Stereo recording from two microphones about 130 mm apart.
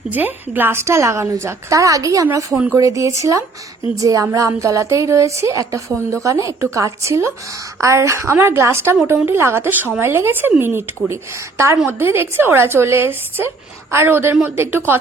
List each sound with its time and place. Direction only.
0.1 s a woman's voice: 15° right (ahead or behind)